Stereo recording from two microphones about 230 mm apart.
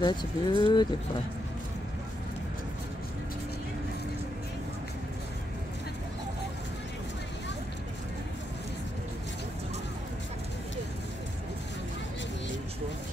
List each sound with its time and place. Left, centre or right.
0.0 s speech: centre